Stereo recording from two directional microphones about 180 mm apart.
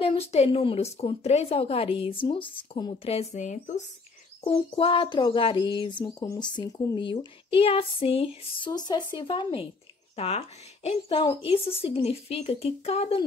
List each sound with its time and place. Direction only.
0.0 s speech: 30° left (ahead or behind)
4.5 s speech: 30° left (ahead or behind)